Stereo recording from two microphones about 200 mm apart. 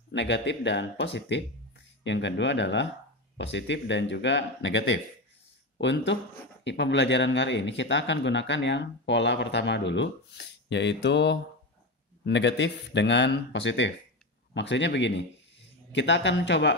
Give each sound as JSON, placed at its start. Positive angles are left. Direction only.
{"t": 0.1, "sound": "a man's voice", "side_deg": 60}